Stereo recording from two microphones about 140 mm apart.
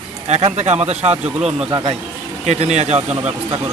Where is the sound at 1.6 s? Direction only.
30° right (ahead or behind).